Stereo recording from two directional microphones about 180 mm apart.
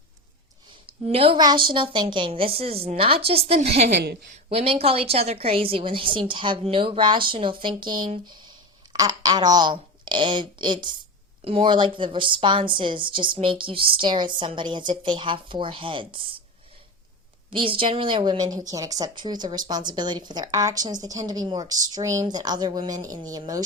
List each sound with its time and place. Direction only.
1.1 s a woman's voice: 30° right (ahead or behind)
4.0 s a woman's voice: 65° right (ahead or behind)
4.5 s a woman's voice: 30° right (ahead or behind)
17.5 s a woman's voice: 30° right (ahead or behind)